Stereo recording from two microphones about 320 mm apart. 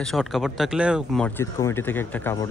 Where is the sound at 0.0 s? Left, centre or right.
Centre.